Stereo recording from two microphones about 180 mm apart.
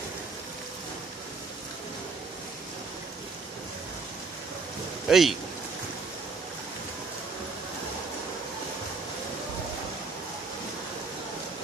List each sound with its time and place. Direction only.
5.0 s speech: centre (ahead or behind)